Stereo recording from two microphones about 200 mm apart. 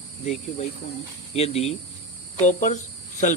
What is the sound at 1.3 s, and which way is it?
Speech, 30° left (ahead or behind).